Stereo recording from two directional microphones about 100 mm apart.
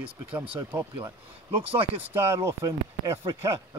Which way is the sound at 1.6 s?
70° right (ahead or behind).